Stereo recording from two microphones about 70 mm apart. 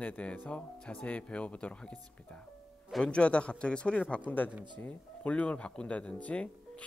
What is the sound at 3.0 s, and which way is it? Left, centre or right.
Speech, centre.